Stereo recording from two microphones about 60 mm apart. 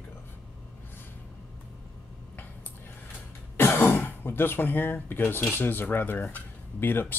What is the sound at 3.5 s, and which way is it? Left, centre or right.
Speech, left.